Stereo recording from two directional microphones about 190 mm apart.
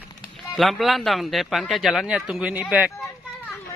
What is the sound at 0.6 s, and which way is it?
Speech, centre (ahead or behind).